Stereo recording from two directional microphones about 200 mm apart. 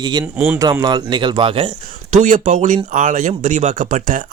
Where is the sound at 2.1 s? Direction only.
40° right (ahead or behind).